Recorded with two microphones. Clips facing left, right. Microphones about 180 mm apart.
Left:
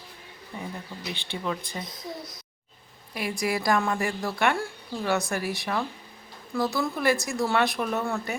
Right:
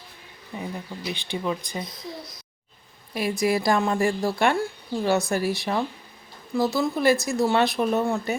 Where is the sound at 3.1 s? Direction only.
25° right (ahead or behind).